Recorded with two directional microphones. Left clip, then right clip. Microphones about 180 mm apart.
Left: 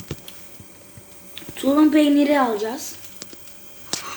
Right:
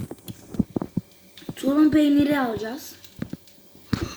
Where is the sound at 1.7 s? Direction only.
35° right (ahead or behind).